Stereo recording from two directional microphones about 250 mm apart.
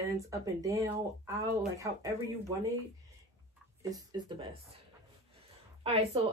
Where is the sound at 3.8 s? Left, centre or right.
Centre.